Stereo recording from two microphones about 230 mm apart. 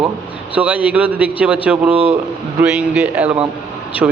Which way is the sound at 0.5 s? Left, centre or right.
Centre.